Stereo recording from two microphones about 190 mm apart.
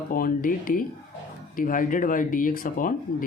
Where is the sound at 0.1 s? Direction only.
45° left (ahead or behind).